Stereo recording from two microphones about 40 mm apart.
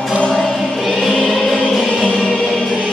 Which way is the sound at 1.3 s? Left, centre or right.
Centre.